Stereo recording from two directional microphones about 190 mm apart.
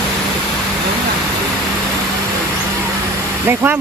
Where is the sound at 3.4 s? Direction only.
10° right (ahead or behind).